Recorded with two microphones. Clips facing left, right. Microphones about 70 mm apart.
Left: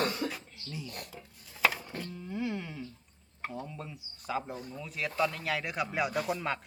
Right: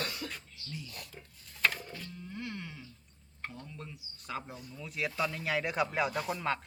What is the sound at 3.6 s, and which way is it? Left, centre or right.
A man's voice, centre.